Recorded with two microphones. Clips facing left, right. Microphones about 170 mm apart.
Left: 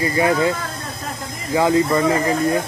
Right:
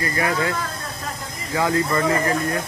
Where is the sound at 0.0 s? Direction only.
25° left (ahead or behind).